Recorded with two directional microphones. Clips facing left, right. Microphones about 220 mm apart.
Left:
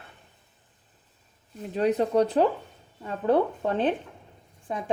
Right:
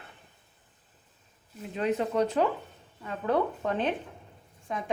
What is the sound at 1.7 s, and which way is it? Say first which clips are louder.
A woman's voice: left 5 dB; 40° left (ahead or behind).